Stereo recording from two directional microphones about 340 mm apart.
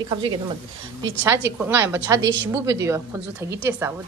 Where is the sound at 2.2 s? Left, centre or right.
Right.